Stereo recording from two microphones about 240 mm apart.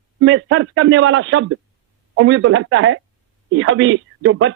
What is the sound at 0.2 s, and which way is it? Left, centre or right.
Speech, right.